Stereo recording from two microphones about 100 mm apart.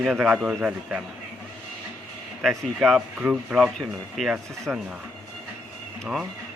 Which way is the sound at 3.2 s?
15° right (ahead or behind).